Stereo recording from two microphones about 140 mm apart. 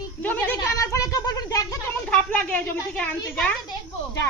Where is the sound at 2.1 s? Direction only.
10° left (ahead or behind).